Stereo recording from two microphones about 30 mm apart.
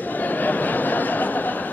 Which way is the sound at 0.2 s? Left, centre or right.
Left.